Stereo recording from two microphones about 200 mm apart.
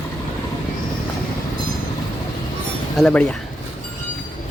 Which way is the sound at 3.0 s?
5° left (ahead or behind).